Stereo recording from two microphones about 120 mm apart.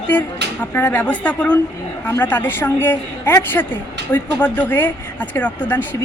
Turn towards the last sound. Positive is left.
turn(degrees=15)  # may be behind; listen again after turning